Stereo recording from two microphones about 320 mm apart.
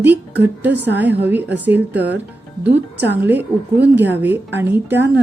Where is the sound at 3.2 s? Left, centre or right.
Centre.